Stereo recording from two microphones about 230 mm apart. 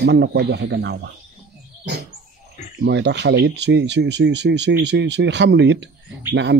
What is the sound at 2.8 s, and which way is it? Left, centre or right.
A man's voice, right.